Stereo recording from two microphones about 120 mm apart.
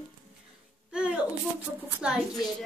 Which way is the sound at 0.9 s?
10° right (ahead or behind).